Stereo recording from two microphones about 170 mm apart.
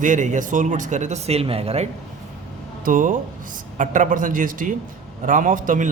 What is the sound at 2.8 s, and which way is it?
Speech, 50° right (ahead or behind).